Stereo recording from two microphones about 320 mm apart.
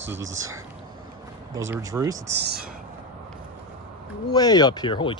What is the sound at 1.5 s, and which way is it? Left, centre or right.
Speech, centre.